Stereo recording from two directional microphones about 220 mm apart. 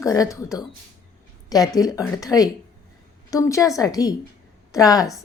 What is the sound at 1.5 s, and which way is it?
A woman's voice, 15° left (ahead or behind).